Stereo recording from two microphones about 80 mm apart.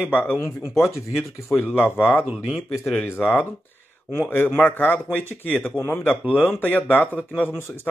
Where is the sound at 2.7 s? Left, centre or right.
Centre.